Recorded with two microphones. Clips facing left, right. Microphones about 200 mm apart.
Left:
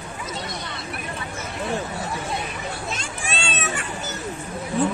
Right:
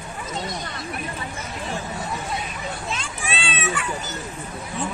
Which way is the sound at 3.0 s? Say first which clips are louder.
Even; 45° left (ahead or behind).